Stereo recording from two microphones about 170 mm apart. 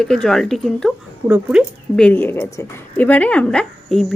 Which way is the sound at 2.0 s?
10° left (ahead or behind).